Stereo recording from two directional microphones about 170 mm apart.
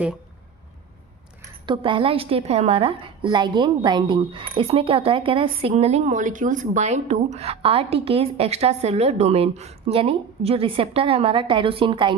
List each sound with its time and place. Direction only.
1.6 s a woman's voice: 30° right (ahead or behind)